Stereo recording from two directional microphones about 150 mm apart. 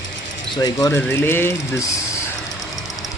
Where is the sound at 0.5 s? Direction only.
25° left (ahead or behind).